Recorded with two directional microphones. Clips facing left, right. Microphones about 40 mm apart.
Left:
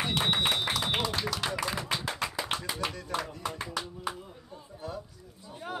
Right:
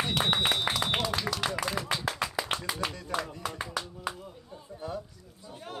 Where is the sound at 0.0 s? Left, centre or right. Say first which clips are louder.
Right 1 dB; centre.